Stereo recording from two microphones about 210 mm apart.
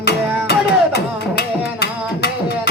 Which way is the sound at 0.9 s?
50° left (ahead or behind).